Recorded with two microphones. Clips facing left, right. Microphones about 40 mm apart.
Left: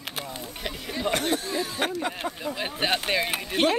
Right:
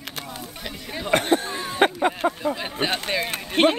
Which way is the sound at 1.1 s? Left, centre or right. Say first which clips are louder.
Right 5 dB; right.